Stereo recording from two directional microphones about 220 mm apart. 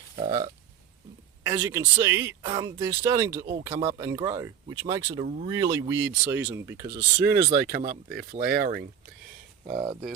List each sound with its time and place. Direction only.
0.2 s speech: 15° right (ahead or behind)
1.5 s speech: 10° right (ahead or behind)
7.8 s speech: 40° right (ahead or behind)